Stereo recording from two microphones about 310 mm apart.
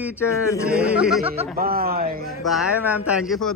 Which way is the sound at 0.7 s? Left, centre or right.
Centre.